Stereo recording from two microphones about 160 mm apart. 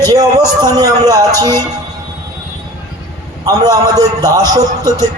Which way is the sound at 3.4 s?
25° right (ahead or behind).